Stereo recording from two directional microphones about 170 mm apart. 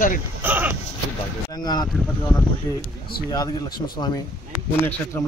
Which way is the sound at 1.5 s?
25° left (ahead or behind).